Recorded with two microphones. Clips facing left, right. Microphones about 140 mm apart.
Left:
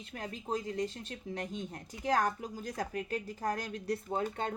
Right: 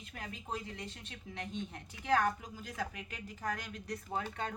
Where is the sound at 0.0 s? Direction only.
35° left (ahead or behind).